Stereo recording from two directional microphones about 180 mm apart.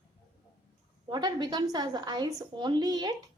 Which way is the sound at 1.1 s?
25° right (ahead or behind).